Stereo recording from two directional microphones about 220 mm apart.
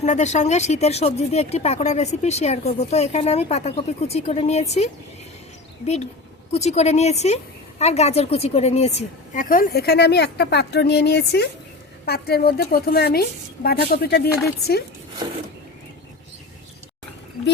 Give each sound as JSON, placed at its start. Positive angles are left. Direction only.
{"t": 0.0, "sound": "speech", "side_deg": 30}
{"t": 5.8, "sound": "a woman's voice", "side_deg": 30}